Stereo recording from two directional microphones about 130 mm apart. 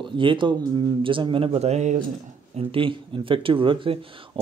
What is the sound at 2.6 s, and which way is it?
Speech, 45° right (ahead or behind).